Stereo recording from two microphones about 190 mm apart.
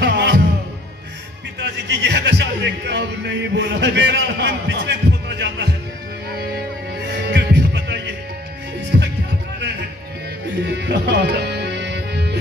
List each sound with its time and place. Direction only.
0.0 s music: 65° right (ahead or behind)
1.6 s speech: 65° right (ahead or behind)
6.3 s music: 60° right (ahead or behind)
10.6 s music: 65° right (ahead or behind)